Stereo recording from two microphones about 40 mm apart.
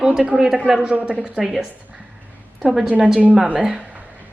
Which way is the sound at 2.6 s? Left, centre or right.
Centre.